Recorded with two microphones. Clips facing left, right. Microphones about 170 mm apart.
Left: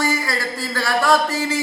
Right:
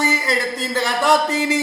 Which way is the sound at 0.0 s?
20° right (ahead or behind).